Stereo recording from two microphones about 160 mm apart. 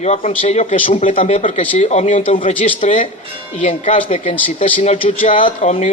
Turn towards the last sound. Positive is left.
turn(degrees=45)  # may be behind; listen again after turning